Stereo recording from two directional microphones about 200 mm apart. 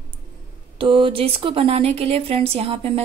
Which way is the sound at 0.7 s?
25° right (ahead or behind).